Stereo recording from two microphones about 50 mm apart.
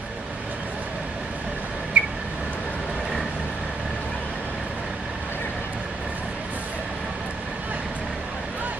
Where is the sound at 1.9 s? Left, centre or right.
Right.